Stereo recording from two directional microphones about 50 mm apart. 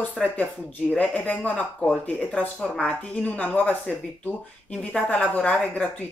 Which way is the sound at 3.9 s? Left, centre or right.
Centre.